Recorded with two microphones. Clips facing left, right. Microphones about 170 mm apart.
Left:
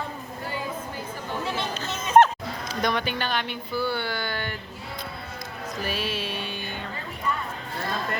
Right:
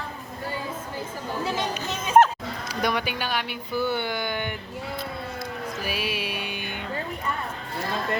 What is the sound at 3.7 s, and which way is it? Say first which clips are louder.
Speech: right 2 dB; 20° right (ahead or behind).